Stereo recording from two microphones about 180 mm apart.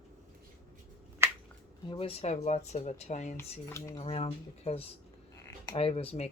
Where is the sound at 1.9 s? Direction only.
30° left (ahead or behind).